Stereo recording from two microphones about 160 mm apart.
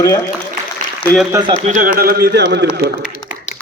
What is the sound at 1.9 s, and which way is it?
Speech, 70° right (ahead or behind).